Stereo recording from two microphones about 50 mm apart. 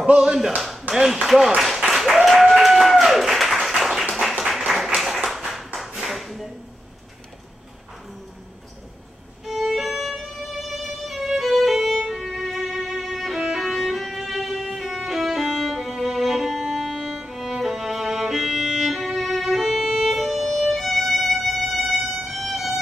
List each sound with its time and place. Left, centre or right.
0.0 s speech: centre
0.6 s speech: centre
1.9 s applause: centre
5.2 s clapping: centre
5.9 s ping: centre
9.5 s violin: centre